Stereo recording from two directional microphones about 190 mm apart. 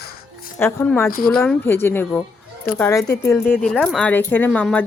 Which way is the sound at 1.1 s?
50° left (ahead or behind).